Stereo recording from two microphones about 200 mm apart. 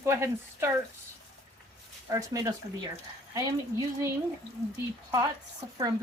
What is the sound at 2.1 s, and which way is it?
Speech, 15° right (ahead or behind).